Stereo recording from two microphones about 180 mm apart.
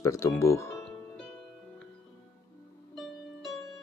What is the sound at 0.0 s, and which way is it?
Speech, 15° left (ahead or behind).